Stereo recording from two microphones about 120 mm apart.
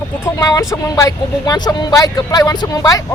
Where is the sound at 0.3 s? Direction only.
30° left (ahead or behind).